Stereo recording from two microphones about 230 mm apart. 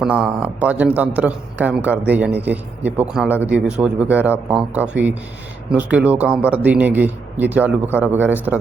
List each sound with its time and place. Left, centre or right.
0.0 s a man's voice: centre